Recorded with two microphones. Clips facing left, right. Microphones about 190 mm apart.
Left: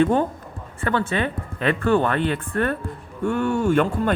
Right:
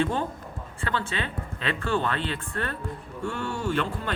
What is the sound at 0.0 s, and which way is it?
A man's voice, 55° left (ahead or behind).